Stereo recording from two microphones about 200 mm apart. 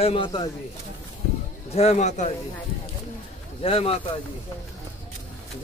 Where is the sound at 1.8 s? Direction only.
35° left (ahead or behind).